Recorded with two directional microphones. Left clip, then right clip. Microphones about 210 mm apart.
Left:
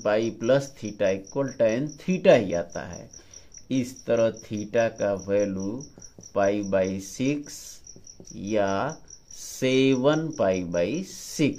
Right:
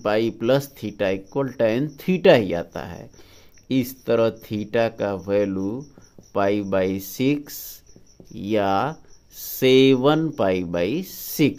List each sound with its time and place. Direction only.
0.0 s speech: 45° right (ahead or behind)